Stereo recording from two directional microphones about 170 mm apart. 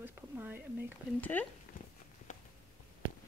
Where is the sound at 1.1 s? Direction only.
10° left (ahead or behind).